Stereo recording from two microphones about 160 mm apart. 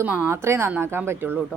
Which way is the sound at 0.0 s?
10° right (ahead or behind).